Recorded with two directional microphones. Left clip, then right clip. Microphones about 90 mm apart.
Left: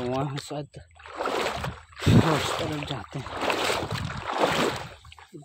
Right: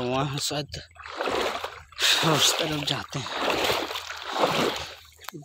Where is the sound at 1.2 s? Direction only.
30° right (ahead or behind).